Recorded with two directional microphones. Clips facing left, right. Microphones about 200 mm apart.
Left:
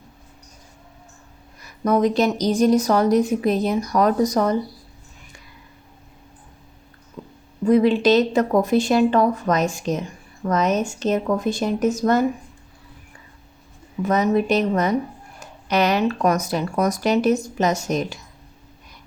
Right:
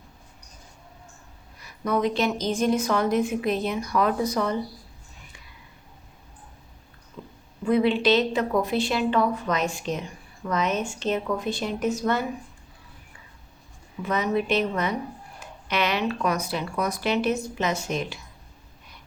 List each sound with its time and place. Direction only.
1.8 s a woman's voice: 45° left (ahead or behind)
7.6 s speech: 40° left (ahead or behind)
14.0 s speech: 45° left (ahead or behind)